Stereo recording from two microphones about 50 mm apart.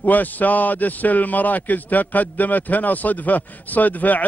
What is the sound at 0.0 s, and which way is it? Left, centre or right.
A man's voice, left.